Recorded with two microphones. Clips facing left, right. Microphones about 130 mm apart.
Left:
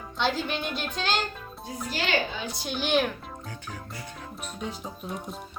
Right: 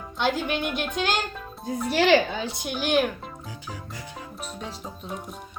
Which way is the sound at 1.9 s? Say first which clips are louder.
Right 9 dB; 85° right.